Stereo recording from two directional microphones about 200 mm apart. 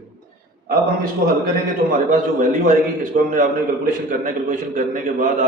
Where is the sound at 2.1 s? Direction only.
40° right (ahead or behind).